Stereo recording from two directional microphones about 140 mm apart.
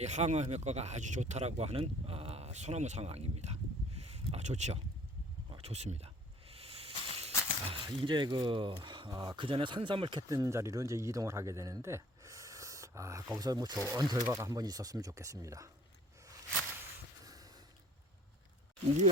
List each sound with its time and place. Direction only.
0.0 s speech: 55° right (ahead or behind)
5.5 s a sound: 45° right (ahead or behind)
7.6 s speech: 35° right (ahead or behind)
17.2 s snort: 25° right (ahead or behind)